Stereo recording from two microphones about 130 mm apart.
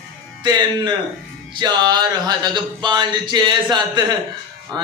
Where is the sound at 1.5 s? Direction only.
35° right (ahead or behind).